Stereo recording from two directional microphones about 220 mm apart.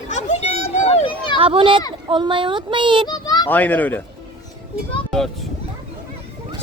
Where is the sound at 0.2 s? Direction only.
30° left (ahead or behind).